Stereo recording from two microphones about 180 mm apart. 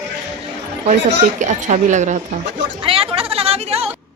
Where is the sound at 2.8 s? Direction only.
30° right (ahead or behind).